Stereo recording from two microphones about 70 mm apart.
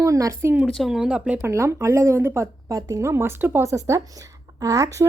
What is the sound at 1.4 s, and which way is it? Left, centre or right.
Speech, right.